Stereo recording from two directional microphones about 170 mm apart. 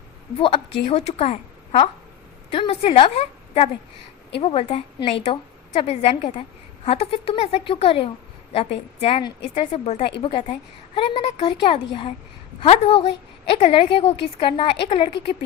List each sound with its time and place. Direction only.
0.3 s a woman's voice: 35° left (ahead or behind)